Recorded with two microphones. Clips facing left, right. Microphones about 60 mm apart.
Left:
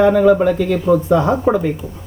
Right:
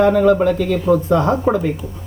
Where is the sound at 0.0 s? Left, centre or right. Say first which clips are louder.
Left 1 dB; centre.